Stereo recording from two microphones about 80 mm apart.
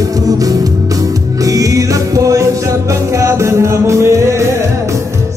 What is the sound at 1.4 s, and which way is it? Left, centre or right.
Music, right.